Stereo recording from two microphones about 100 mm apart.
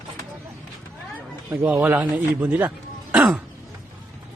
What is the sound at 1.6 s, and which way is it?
A man's voice, 20° right (ahead or behind).